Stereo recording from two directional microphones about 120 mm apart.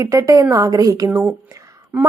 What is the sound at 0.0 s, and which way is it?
A woman's voice, 25° right (ahead or behind).